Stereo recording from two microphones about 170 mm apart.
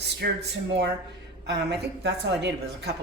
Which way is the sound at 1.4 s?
80° right.